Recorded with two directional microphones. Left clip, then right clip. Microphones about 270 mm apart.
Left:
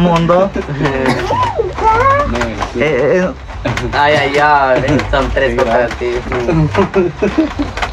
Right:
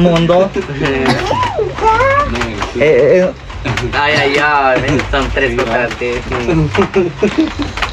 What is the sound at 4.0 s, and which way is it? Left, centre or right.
Speech, left.